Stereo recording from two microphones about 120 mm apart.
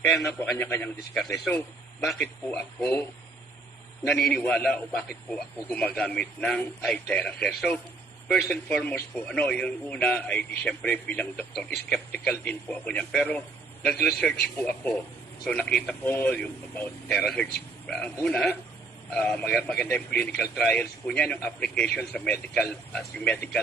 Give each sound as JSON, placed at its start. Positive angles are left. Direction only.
{"t": 0.5, "sound": "a man's voice", "side_deg": 15}
{"t": 2.0, "sound": "speech", "side_deg": 0}
{"t": 2.2, "sound": "a man's voice", "side_deg": 15}
{"t": 4.1, "sound": "a man's voice", "side_deg": 10}